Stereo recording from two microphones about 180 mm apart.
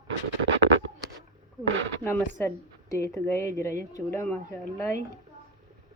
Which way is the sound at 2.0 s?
10° left (ahead or behind).